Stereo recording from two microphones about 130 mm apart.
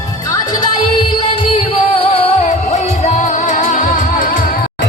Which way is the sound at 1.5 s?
45° left (ahead or behind).